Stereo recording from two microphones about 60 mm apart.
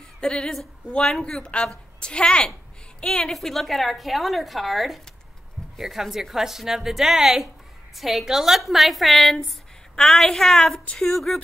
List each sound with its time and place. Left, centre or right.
0.2 s a woman's voice: centre